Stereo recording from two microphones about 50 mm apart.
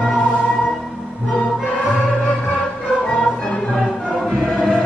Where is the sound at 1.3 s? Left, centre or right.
Left.